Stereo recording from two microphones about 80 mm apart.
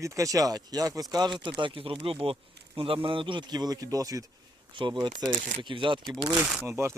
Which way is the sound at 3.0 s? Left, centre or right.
Right.